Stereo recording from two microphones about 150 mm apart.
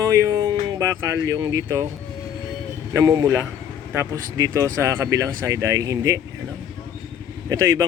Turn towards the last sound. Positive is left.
turn(degrees=-20)  # may be behind; listen again after turning